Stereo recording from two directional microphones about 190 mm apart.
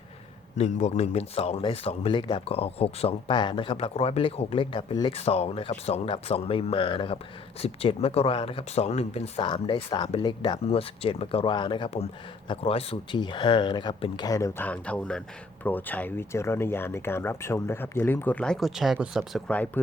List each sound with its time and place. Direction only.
0.5 s speech: 35° left (ahead or behind); by 19.8 s 5° left (ahead or behind)